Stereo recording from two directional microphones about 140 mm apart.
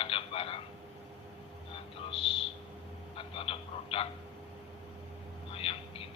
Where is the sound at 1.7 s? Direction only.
40° left (ahead or behind).